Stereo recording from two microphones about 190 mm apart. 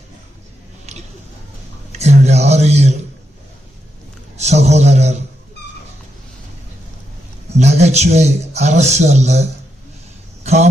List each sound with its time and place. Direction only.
1.9 s speech: 35° right (ahead or behind)
4.4 s a man's voice: 35° right (ahead or behind)
7.5 s a man's voice: 35° right (ahead or behind)